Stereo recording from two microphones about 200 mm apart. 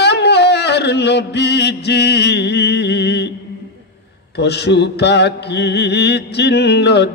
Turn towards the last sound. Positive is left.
turn(degrees=55)  # may be behind; listen again after turning